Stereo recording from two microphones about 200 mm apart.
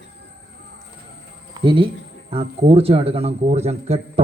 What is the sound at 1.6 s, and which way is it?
Speech, 25° right (ahead or behind).